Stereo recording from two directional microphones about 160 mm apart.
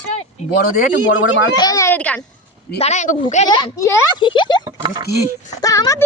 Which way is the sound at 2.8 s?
45° left (ahead or behind).